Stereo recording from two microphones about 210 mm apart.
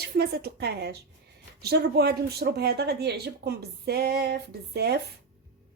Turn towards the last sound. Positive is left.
turn(degrees=-50)  # may be behind; listen again after turning